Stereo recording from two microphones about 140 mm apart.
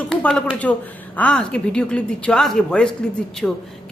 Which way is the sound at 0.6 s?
10° left (ahead or behind).